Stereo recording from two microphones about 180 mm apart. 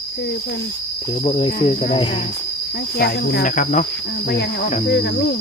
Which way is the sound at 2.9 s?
60° left (ahead or behind).